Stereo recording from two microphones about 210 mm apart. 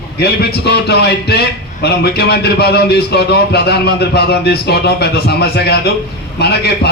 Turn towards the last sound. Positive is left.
turn(degrees=50)  # may be behind; listen again after turning